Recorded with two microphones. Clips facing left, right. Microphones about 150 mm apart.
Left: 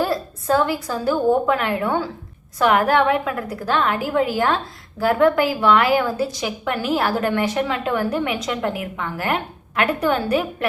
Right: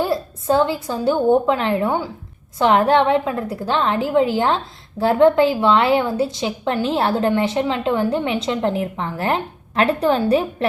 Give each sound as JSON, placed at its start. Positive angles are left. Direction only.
{"t": 0.0, "sound": "a woman's voice", "side_deg": -20}